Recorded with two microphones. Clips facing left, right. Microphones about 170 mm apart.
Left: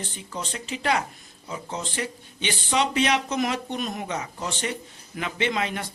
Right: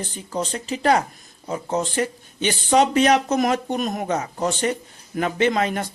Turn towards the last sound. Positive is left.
turn(degrees=-45)  # may be behind; listen again after turning